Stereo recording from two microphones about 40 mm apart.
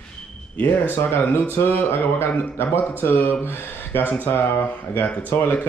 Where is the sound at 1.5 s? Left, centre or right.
Left.